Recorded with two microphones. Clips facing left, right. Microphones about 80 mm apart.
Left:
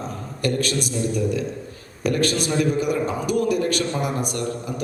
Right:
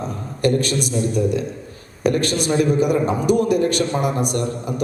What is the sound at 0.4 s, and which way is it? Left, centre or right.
A man's voice, right.